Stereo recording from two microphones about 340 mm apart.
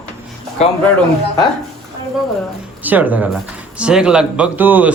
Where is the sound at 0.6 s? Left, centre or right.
Centre.